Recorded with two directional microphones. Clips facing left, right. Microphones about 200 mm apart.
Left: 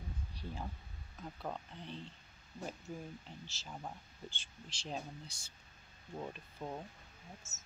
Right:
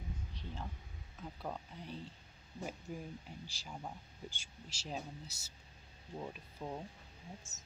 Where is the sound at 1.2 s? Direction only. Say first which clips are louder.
Left 1 dB; 5° right (ahead or behind).